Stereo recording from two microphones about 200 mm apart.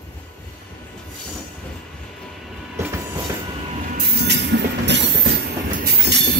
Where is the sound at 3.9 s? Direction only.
60° right (ahead or behind).